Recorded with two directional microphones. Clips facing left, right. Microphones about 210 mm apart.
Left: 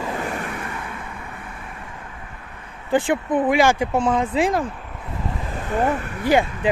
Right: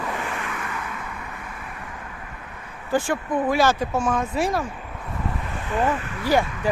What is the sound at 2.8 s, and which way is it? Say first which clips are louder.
Speech: left 3 dB; 20° left (ahead or behind).